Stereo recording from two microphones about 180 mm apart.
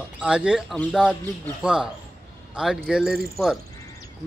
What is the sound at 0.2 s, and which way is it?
Speech, 5° right (ahead or behind).